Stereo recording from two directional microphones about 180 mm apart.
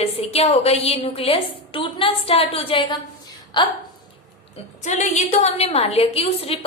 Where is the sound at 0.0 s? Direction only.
35° left (ahead or behind).